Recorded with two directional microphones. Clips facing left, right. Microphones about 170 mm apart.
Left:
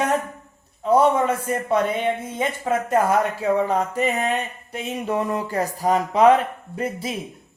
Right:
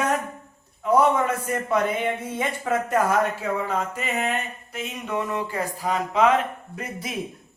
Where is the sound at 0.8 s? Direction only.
25° left (ahead or behind).